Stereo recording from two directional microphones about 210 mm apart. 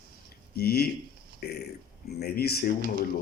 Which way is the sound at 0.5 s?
50° left (ahead or behind).